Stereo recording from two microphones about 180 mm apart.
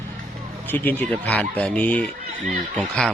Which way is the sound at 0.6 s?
10° left (ahead or behind).